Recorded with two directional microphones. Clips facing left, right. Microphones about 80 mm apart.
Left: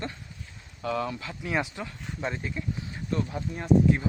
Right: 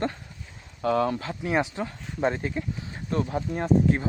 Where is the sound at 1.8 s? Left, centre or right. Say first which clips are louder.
Right 7 dB; right.